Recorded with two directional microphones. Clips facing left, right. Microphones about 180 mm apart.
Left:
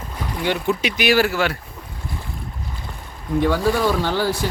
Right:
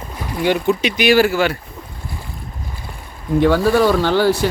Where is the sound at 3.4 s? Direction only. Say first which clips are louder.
Right 5 dB; 75° right (ahead or behind).